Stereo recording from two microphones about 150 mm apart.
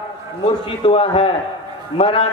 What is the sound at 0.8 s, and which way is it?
A man's voice, 35° left (ahead or behind).